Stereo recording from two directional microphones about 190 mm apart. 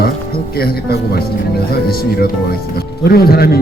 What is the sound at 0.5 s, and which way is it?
Speech, 55° left (ahead or behind).